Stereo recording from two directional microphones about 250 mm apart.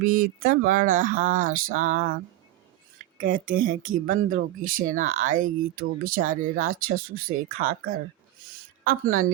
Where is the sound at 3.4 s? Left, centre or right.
Right.